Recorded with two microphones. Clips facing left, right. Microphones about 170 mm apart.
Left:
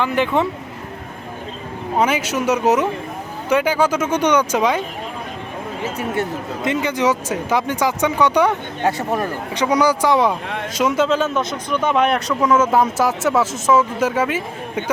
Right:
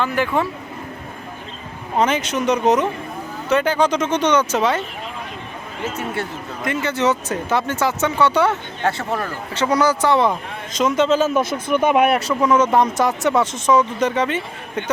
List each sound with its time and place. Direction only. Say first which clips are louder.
0.0 s speech: left 2 dB; 20° left (ahead or behind)
2.0 s speech: even; 10° left (ahead or behind)
6.7 s speech: left 1 dB; 15° left (ahead or behind)
11.8 s speech: right 1 dB; 10° right (ahead or behind); by 14.8 s 5° left (ahead or behind)